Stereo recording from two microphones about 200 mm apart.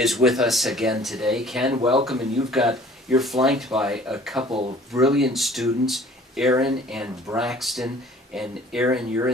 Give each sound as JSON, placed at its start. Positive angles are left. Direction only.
{"t": 0.0, "sound": "speech", "side_deg": 0}
{"t": 4.4, "sound": "speech", "side_deg": -30}
{"t": 4.9, "sound": "speech", "side_deg": 0}